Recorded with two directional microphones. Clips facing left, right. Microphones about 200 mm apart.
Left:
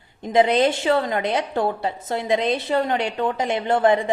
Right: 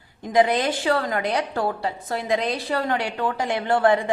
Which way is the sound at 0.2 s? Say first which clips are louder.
Left 2 dB; 25° left (ahead or behind).